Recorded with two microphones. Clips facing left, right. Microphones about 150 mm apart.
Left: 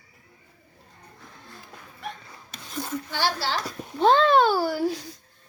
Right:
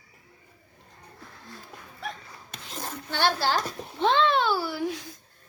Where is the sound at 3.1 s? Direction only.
60° right (ahead or behind).